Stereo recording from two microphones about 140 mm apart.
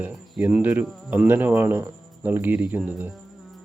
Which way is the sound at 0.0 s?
10° right (ahead or behind).